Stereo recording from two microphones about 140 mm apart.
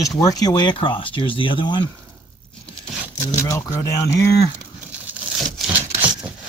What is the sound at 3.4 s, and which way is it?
Speech, 25° left (ahead or behind).